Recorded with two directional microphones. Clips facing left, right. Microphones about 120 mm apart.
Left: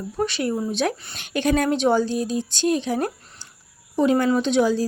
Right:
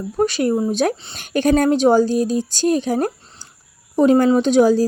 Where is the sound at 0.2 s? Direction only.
40° right (ahead or behind).